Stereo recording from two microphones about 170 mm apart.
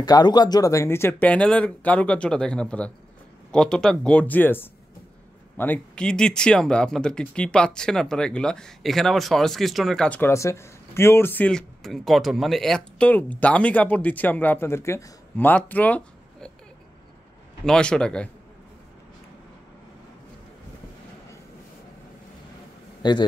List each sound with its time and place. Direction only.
0.0 s speech: 25° left (ahead or behind); by 16.5 s 5° left (ahead or behind)
17.6 s speech: 5° left (ahead or behind)
23.0 s a man's voice: 25° left (ahead or behind)